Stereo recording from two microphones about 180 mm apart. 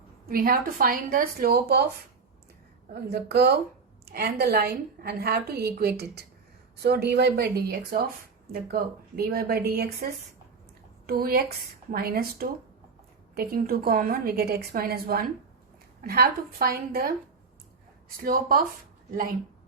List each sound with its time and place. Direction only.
0.3 s a woman's voice: 55° right (ahead or behind)
2.9 s a woman's voice: 65° right (ahead or behind)
11.0 s a woman's voice: 55° right (ahead or behind)
18.2 s speech: 55° right (ahead or behind)